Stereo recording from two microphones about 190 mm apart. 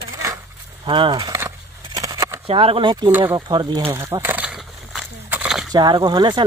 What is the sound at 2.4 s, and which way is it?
Speech, 30° right (ahead or behind).